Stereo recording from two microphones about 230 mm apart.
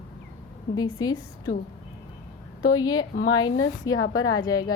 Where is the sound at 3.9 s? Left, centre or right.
Left.